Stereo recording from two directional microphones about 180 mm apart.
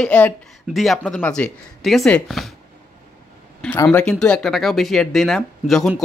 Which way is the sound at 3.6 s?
10° left (ahead or behind).